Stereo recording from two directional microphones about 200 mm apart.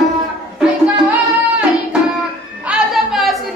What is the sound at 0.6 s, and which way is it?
Music, 5° right (ahead or behind).